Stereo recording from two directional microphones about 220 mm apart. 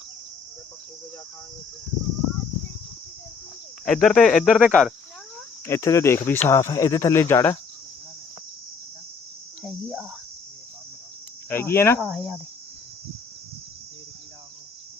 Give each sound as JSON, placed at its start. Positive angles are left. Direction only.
{"t": 3.8, "sound": "speech", "side_deg": 5}
{"t": 5.6, "sound": "speech", "side_deg": 15}
{"t": 11.4, "sound": "speech", "side_deg": 10}
{"t": 11.9, "sound": "speech", "side_deg": 0}